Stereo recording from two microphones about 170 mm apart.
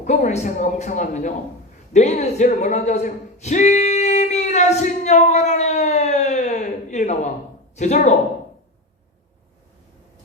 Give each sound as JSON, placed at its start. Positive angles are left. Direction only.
{"t": 0.0, "sound": "a man's voice", "side_deg": 45}
{"t": 1.9, "sound": "a sound", "side_deg": 45}
{"t": 7.8, "sound": "a man's voice", "side_deg": 45}